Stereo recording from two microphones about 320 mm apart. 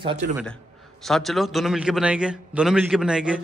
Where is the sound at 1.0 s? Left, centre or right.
Centre.